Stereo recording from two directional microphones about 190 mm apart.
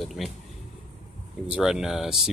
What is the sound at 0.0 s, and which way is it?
Speech, centre (ahead or behind).